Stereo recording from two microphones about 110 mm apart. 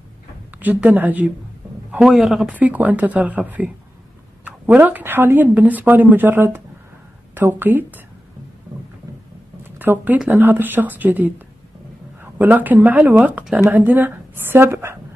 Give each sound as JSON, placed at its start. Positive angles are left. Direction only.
{"t": 0.6, "sound": "speech", "side_deg": -15}
{"t": 1.9, "sound": "a man's voice", "side_deg": -5}
{"t": 2.5, "sound": "speech", "side_deg": -15}
{"t": 9.6, "sound": "speech", "side_deg": -15}